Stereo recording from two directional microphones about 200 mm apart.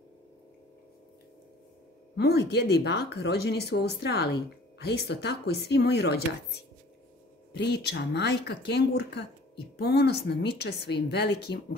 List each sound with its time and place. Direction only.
2.1 s speech: 55° left (ahead or behind)
7.5 s speech: 55° left (ahead or behind)